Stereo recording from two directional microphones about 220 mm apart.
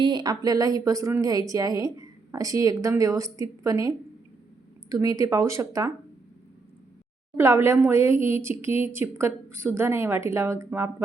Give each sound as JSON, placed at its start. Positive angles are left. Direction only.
{"t": 0.0, "sound": "a woman's voice", "side_deg": -20}
{"t": 7.3, "sound": "a woman's voice", "side_deg": -10}